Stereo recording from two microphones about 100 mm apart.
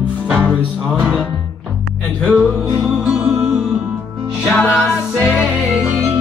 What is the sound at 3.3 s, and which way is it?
Music, 20° right (ahead or behind).